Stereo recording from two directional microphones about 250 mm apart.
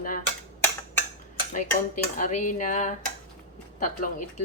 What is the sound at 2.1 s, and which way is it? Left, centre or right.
Speech, left.